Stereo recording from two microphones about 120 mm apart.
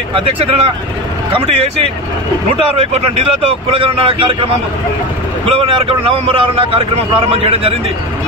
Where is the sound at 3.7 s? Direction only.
50° right (ahead or behind).